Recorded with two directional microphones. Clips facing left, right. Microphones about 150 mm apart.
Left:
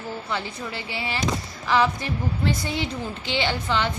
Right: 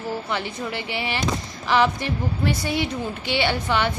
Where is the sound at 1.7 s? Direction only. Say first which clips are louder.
Right 1 dB; 20° right (ahead or behind).